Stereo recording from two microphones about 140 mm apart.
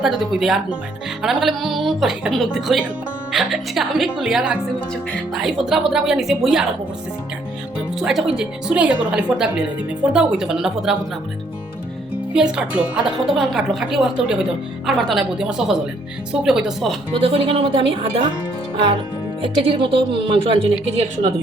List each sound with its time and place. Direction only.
0.0 s a woman's voice: 5° right (ahead or behind)
7.9 s a woman's voice: 5° right (ahead or behind)
12.3 s a woman's voice: 5° right (ahead or behind)
17.2 s speech: 35° right (ahead or behind)
19.5 s speech: 35° right (ahead or behind)